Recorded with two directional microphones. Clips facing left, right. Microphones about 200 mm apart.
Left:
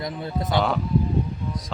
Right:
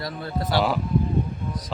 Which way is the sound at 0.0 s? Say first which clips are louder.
Left 1 dB; 20° left (ahead or behind).